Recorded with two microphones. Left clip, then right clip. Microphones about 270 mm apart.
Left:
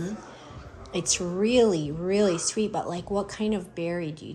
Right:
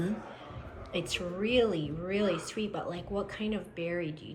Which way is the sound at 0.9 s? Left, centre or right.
Centre.